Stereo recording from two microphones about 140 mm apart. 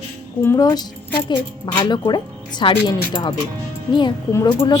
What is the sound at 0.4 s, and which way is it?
A woman's voice, 25° left (ahead or behind).